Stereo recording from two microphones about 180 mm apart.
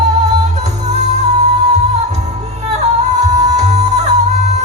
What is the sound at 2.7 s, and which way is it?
Music, 40° right (ahead or behind).